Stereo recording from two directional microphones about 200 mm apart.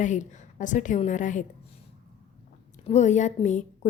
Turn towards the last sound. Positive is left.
turn(degrees=35)  # may be behind; listen again after turning